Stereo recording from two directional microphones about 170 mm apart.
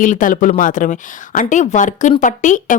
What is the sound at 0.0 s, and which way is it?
A woman's voice, 50° left (ahead or behind).